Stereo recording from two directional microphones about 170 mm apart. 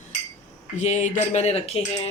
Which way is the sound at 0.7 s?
45° left (ahead or behind).